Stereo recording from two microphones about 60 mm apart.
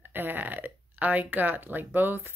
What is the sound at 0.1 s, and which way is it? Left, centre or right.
Speech, right.